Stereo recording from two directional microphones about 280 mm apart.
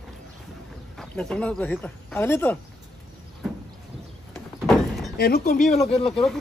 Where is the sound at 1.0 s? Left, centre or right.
Centre.